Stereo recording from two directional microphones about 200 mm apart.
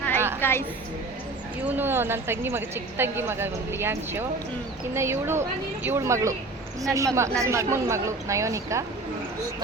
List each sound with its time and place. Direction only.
0.3 s a woman's voice: 10° left (ahead or behind)
1.6 s a woman's voice: 10° right (ahead or behind)